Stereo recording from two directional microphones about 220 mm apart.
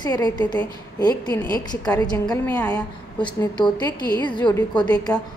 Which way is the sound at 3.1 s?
20° left (ahead or behind).